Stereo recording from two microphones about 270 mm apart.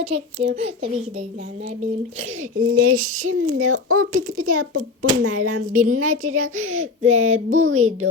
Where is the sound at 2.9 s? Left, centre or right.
Right.